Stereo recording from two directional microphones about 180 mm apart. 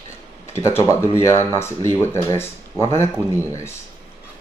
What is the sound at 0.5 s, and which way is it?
Speech, 15° left (ahead or behind).